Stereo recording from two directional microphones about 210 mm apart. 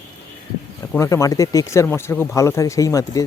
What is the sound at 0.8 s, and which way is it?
Speech, 15° left (ahead or behind).